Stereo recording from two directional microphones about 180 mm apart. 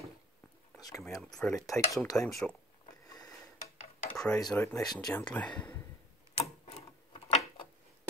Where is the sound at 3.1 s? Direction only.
20° left (ahead or behind).